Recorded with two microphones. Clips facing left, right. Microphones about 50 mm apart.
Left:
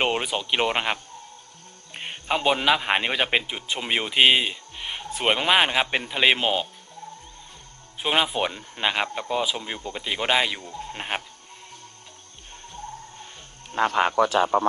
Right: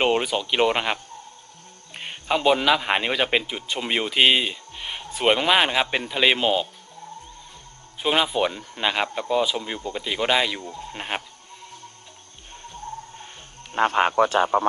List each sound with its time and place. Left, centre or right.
0.0 s speech: centre
8.0 s speech: centre
10.9 s sheep: centre
13.7 s speech: right